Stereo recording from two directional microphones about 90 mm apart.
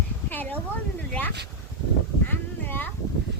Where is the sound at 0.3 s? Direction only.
20° left (ahead or behind).